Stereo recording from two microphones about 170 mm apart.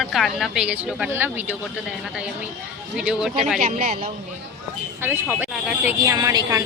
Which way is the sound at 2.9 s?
5° right (ahead or behind).